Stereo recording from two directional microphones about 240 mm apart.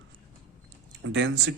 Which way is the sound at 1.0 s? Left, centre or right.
Right.